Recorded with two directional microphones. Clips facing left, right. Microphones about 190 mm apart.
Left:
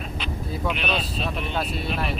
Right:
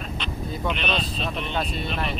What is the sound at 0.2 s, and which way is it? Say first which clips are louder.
Speech: left 1 dB; 5° left (ahead or behind).